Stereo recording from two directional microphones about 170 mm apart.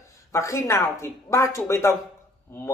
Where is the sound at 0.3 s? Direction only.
15° left (ahead or behind).